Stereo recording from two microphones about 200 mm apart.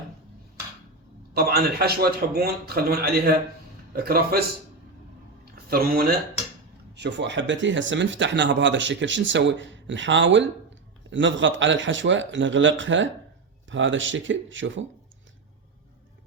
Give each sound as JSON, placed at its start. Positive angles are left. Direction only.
{"t": 1.3, "sound": "a man's voice", "side_deg": -50}
{"t": 5.6, "sound": "a man's voice", "side_deg": -50}
{"t": 6.9, "sound": "a man's voice", "side_deg": -60}